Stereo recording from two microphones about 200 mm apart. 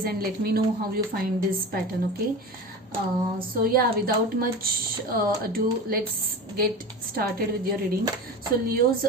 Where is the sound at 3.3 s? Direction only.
45° right (ahead or behind).